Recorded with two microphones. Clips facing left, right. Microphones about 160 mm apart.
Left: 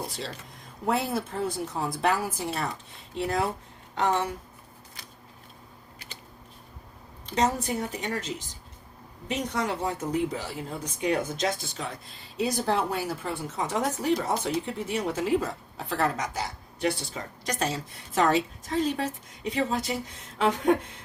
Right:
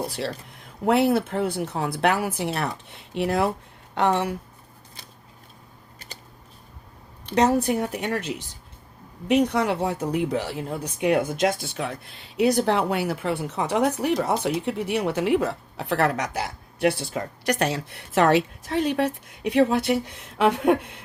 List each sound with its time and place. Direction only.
0.1 s a woman's voice: 65° right (ahead or behind)
7.3 s a woman's voice: 65° right (ahead or behind)